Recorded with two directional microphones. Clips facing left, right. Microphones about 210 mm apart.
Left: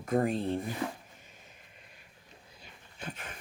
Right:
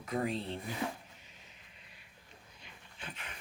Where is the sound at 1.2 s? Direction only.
50° left (ahead or behind).